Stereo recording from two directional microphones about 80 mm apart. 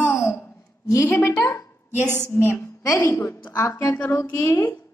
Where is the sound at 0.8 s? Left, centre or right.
Left.